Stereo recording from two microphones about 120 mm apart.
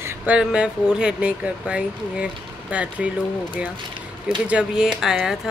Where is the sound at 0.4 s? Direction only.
10° right (ahead or behind).